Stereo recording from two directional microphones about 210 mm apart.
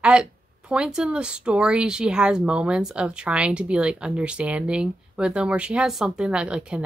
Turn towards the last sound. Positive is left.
turn(degrees=-5)  # may be behind; listen again after turning